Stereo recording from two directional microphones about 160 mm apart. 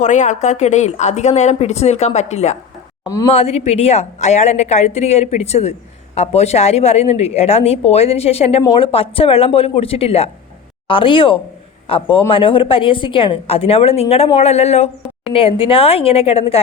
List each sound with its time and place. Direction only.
0.0 s a woman's voice: 50° left (ahead or behind)